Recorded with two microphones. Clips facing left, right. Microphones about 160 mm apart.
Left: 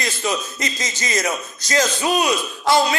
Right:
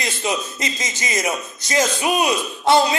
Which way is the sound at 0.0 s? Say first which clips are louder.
Even; 20° right (ahead or behind).